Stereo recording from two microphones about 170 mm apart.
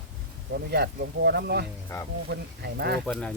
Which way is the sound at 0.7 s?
75° right (ahead or behind).